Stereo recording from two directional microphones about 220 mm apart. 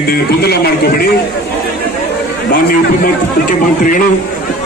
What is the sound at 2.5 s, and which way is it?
Speech, 40° left (ahead or behind).